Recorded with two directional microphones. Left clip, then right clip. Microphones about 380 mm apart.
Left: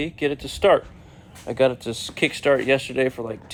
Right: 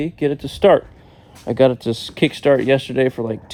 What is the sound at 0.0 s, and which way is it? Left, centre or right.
Speech, centre.